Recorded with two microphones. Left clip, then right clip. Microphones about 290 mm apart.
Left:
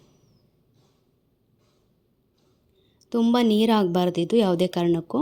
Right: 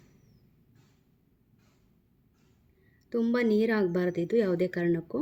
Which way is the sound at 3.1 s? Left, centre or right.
Centre.